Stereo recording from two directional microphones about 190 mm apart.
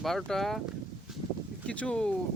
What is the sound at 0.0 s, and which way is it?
Speech, centre (ahead or behind).